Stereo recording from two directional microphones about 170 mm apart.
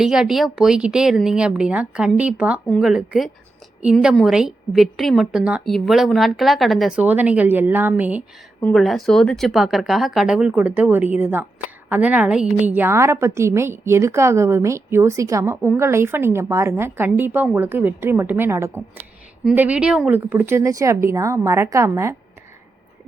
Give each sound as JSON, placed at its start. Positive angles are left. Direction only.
{"t": 0.0, "sound": "a woman's voice", "side_deg": -5}
{"t": 8.6, "sound": "a woman's voice", "side_deg": 0}